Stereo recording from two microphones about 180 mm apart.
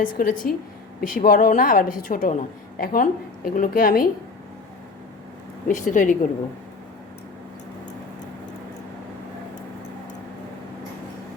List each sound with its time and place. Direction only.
0.0 s a woman's voice: 50° left (ahead or behind)
5.6 s a woman's voice: 45° left (ahead or behind)